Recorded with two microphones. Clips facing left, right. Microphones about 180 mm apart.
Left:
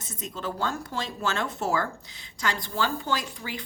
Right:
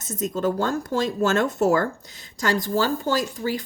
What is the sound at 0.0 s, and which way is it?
A woman's voice, 45° right (ahead or behind).